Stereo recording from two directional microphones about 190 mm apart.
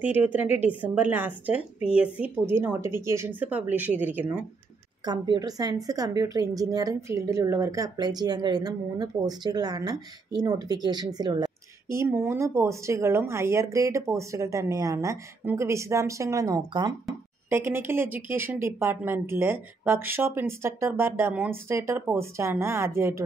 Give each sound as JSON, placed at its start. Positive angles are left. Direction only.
{"t": 0.0, "sound": "speech", "side_deg": -10}
{"t": 5.0, "sound": "a woman's voice", "side_deg": -25}